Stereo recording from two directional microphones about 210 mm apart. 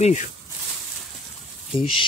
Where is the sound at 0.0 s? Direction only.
35° left (ahead or behind).